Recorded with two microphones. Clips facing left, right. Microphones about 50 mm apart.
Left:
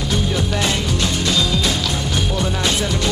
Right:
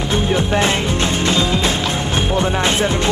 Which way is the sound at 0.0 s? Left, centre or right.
Right.